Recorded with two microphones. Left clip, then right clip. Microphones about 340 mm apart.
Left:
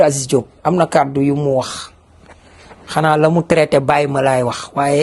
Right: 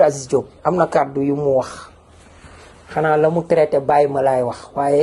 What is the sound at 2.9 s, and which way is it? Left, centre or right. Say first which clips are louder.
Speech: left 2 dB; left.